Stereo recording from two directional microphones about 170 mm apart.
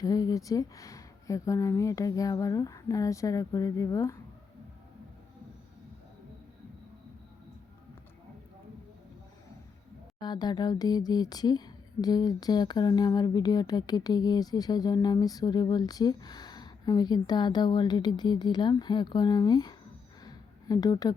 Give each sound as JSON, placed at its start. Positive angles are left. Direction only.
{"t": 0.0, "sound": "speech", "side_deg": 20}
{"t": 10.2, "sound": "speech", "side_deg": 25}
{"t": 20.2, "sound": "a sound", "side_deg": 25}